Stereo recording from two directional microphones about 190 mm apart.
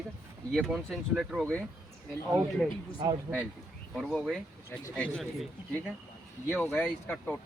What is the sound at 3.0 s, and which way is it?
Speech, 20° right (ahead or behind).